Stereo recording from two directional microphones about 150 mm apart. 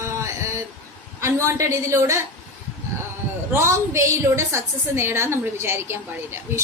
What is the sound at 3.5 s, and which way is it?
A woman's voice, 15° right (ahead or behind).